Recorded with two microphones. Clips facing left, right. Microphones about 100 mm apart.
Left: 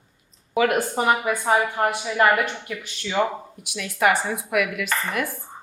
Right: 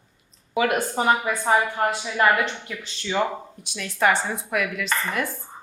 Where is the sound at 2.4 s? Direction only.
30° right (ahead or behind).